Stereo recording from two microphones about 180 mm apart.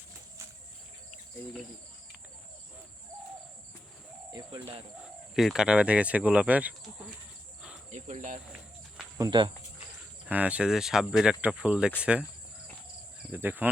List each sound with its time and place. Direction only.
4.3 s bird: 20° right (ahead or behind)
5.3 s speech: centre (ahead or behind)
7.9 s cricket: 40° right (ahead or behind)
9.1 s speech: 20° right (ahead or behind)
10.2 s speech: 10° right (ahead or behind)
13.3 s speech: 10° right (ahead or behind)